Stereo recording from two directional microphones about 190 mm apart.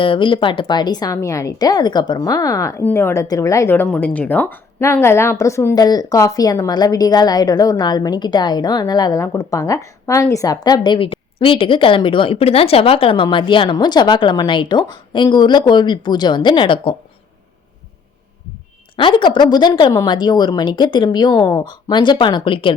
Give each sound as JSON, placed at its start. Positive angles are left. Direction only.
{"t": 0.0, "sound": "a woman's voice", "side_deg": 25}
{"t": 18.9, "sound": "a woman's voice", "side_deg": 25}